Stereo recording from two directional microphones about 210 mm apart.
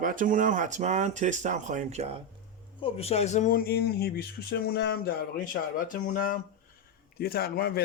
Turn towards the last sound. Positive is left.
turn(degrees=50)  # may be behind; listen again after turning